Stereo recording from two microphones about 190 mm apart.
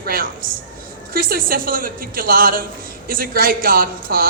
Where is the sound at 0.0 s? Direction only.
50° right (ahead or behind).